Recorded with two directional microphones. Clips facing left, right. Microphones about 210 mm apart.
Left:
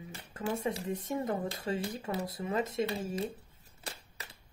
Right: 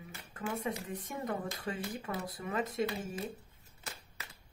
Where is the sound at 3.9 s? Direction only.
30° left (ahead or behind).